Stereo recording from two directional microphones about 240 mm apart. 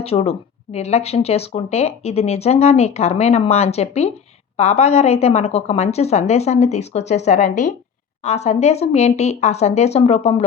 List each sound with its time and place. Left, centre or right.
0.0 s speech: left